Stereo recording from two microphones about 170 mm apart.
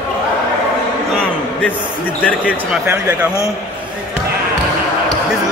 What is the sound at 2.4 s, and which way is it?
Speech, 5° right (ahead or behind).